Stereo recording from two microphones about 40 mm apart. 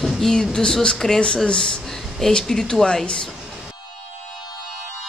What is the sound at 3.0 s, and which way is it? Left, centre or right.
Speech, left.